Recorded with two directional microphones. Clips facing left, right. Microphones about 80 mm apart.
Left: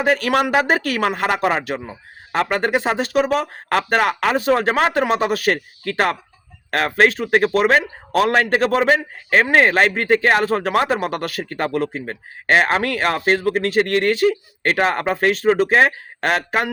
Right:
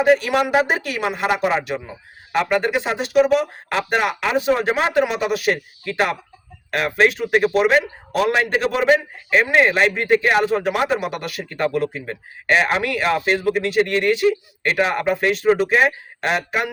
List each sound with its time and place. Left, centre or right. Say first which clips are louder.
0.0 s speech: right 1 dB; left